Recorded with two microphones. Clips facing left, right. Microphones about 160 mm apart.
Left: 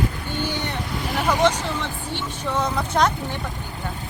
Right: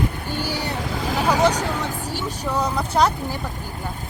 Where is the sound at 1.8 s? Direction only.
40° right (ahead or behind).